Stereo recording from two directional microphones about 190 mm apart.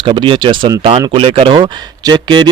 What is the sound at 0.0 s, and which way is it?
Speech, 25° right (ahead or behind).